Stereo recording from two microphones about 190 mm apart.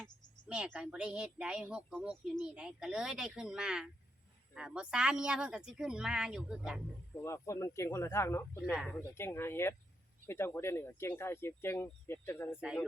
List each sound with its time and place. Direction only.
0.0 s speech: 5° right (ahead or behind)
7.2 s speech: 15° left (ahead or behind)
12.5 s speech: 5° right (ahead or behind)